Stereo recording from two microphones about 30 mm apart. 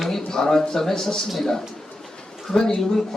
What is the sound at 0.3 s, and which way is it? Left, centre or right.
Speech, centre.